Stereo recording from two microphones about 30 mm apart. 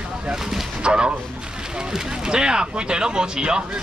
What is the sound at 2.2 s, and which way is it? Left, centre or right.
Speech, right.